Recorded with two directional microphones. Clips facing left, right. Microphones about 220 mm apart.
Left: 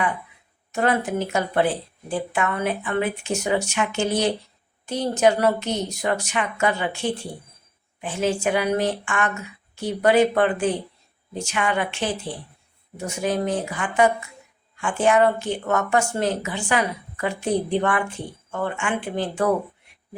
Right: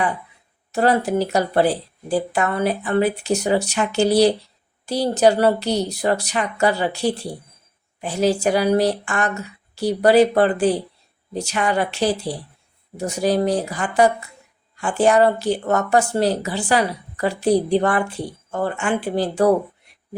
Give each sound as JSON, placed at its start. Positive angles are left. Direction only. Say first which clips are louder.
{"t": 0.7, "sound": "a woman's voice", "louder": "right 4 dB", "side_deg": -35}